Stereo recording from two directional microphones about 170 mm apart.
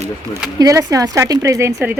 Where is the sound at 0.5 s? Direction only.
20° right (ahead or behind).